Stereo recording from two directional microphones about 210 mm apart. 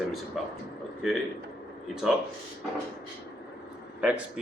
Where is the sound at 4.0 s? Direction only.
5° right (ahead or behind).